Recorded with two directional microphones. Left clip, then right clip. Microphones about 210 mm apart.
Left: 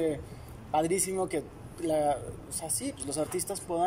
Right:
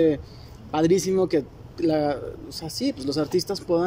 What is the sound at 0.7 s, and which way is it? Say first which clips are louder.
A man's voice: right 7 dB; 50° right (ahead or behind).